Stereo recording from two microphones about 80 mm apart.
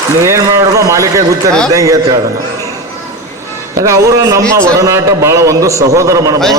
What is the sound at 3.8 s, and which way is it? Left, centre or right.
A man's voice, right.